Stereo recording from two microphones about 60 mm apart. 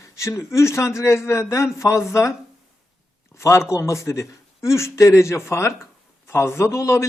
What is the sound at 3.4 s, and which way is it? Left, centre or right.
A man's voice, left.